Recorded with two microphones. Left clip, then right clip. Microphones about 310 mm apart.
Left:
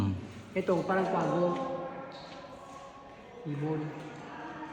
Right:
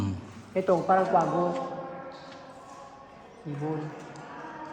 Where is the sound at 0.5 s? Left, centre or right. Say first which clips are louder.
Right 6 dB; right.